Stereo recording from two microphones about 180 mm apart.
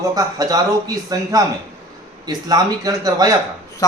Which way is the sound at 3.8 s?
20° left (ahead or behind).